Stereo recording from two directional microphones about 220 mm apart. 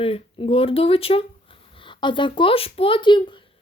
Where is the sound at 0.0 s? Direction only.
25° left (ahead or behind).